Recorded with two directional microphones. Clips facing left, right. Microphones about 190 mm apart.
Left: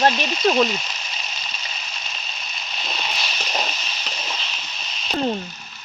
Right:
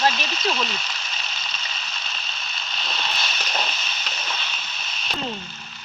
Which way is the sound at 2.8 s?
15° left (ahead or behind).